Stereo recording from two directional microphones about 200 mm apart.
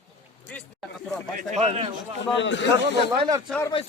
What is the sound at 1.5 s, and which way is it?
Speech, 30° right (ahead or behind).